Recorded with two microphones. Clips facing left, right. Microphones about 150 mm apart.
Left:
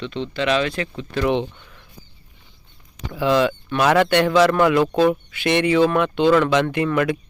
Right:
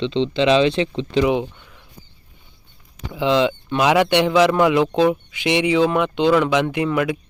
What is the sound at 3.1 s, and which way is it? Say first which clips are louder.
Speech: even; 20° right (ahead or behind).